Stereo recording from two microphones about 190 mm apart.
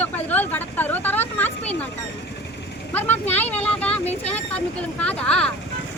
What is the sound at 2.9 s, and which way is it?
Speech, 10° left (ahead or behind).